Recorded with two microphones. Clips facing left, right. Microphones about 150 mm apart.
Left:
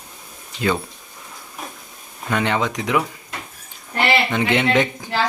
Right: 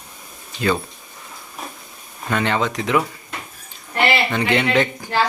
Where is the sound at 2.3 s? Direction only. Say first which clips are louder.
Even; 15° left (ahead or behind).